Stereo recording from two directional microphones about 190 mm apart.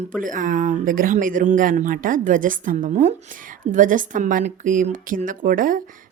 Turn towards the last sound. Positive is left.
turn(degrees=-45)  # may be behind; listen again after turning